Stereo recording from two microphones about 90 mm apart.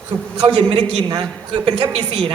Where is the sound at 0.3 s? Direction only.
70° right (ahead or behind).